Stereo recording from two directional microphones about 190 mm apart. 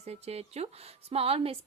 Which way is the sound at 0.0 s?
35° right (ahead or behind).